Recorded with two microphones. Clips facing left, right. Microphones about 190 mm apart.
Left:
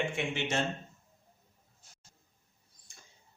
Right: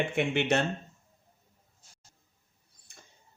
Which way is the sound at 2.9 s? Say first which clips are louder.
Right 4 dB; 60° right (ahead or behind).